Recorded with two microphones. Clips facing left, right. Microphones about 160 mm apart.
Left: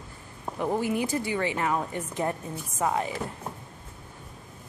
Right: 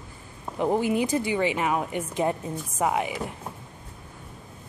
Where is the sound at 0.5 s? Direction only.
20° right (ahead or behind).